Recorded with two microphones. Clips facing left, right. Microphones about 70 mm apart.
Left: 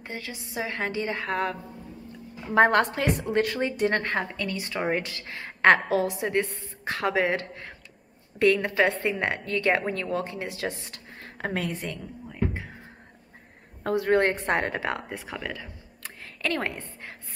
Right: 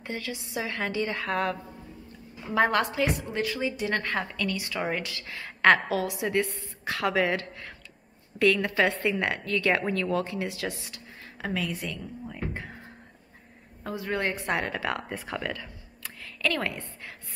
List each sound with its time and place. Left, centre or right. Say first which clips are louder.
0.0 s a woman's voice: right 2 dB; left
2.5 s a woman's voice: left 4 dB; left
3.9 s a woman's voice: left 2 dB; left
11.3 s a woman's voice: left 1 dB; left
13.8 s a woman's voice: left 8 dB; left
14.4 s a woman's voice: left 3 dB; left
14.8 s a woman's voice: left 1 dB; left
15.0 s speech: right 2 dB; centre
16.0 s a sound: right 2 dB; left